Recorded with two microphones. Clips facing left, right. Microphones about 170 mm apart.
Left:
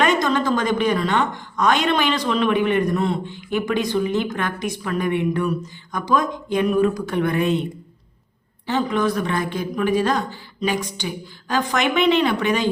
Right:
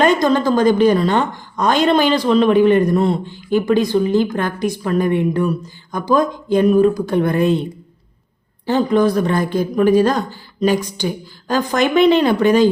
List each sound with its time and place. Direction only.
0.0 s a woman's voice: 35° right (ahead or behind)